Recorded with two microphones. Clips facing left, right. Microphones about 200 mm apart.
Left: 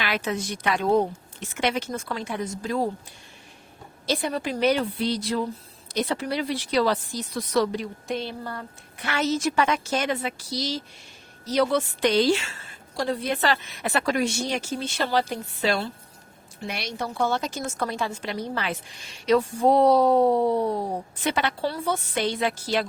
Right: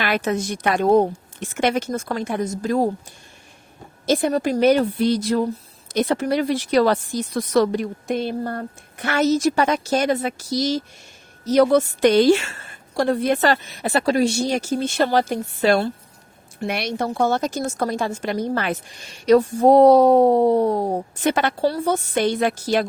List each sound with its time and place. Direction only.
0.0 s a woman's voice: 50° right (ahead or behind)
4.0 s a woman's voice: 45° right (ahead or behind)